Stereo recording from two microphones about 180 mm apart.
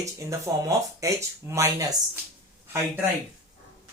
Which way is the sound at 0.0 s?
15° right (ahead or behind).